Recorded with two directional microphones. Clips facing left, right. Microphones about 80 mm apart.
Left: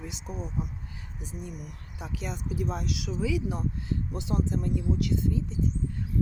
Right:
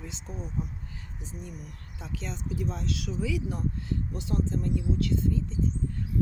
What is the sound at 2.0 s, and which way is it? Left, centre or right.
Speech, centre.